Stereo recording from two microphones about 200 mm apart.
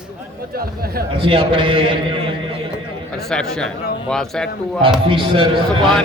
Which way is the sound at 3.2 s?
5° left (ahead or behind).